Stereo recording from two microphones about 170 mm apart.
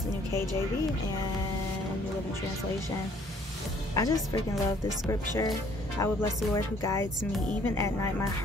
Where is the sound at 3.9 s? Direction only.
20° left (ahead or behind).